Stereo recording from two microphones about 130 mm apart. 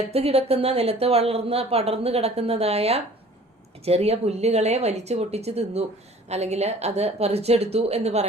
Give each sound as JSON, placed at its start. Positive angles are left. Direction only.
{"t": 0.1, "sound": "a woman's voice", "side_deg": -50}